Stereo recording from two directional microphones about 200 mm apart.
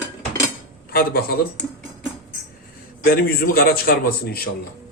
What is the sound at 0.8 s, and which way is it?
Speech, 50° left (ahead or behind).